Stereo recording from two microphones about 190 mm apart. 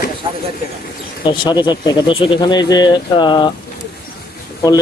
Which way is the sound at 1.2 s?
25° left (ahead or behind).